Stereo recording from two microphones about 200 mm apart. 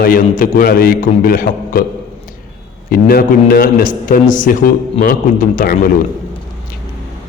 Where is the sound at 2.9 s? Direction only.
50° left (ahead or behind).